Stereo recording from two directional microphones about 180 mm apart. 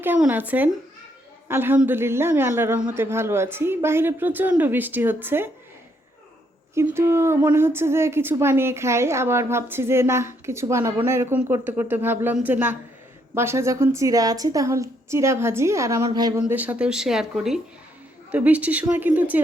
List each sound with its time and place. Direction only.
0.0 s a woman's voice: 10° right (ahead or behind)
6.7 s a woman's voice: 15° right (ahead or behind)